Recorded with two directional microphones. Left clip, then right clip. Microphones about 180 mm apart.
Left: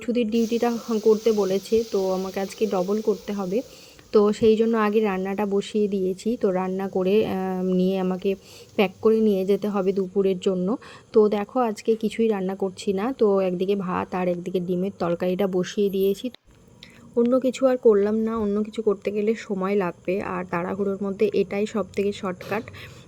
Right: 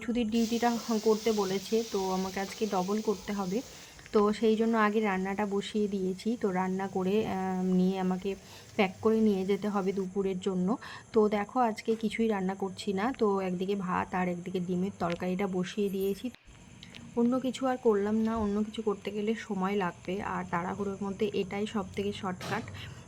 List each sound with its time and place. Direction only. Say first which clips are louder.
0.0 s speech: left 8 dB; 15° left (ahead or behind)